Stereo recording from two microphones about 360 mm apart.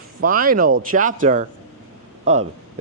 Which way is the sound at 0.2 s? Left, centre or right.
Right.